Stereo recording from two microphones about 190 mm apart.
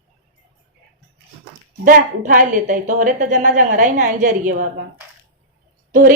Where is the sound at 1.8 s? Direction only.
45° right (ahead or behind).